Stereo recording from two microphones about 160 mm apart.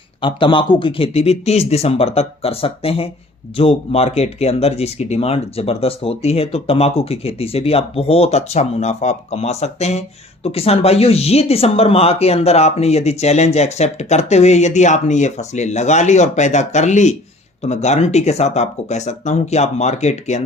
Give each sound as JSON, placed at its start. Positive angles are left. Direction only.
{"t": 0.2, "sound": "speech", "side_deg": 30}